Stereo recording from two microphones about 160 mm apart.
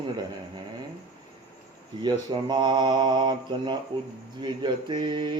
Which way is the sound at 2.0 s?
25° right (ahead or behind).